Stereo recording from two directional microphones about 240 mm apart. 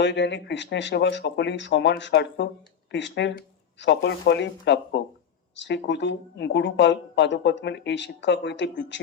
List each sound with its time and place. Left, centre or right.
0.0 s speech: left